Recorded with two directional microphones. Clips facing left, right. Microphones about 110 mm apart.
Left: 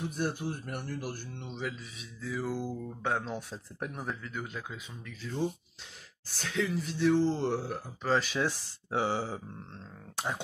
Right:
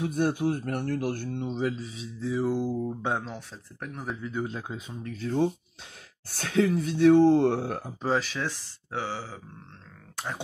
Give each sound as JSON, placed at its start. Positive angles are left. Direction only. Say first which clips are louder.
{"t": 0.0, "sound": "speech", "louder": "right 7 dB", "side_deg": -55}
{"t": 3.9, "sound": "speech", "louder": "right 5 dB", "side_deg": 0}
{"t": 4.2, "sound": "speech", "louder": "right 7 dB", "side_deg": -25}
{"t": 5.2, "sound": "speech", "louder": "right 7 dB", "side_deg": -55}
{"t": 8.3, "sound": "speech", "louder": "left 1 dB", "side_deg": 15}